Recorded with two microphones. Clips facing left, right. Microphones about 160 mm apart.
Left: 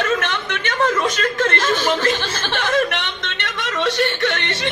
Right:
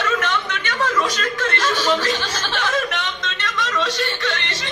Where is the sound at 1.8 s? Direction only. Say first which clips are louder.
Left 1 dB; 55° left (ahead or behind).